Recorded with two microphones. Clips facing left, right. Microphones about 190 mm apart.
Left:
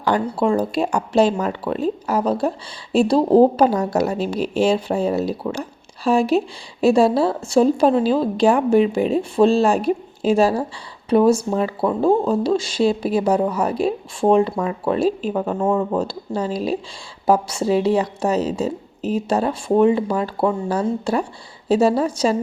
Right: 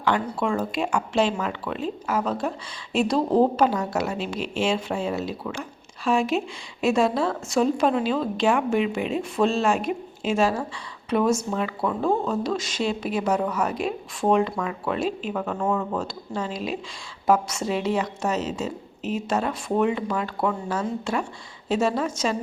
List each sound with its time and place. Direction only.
0.0 s speech: 35° left (ahead or behind)